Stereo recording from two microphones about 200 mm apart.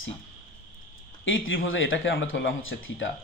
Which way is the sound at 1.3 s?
75° left (ahead or behind).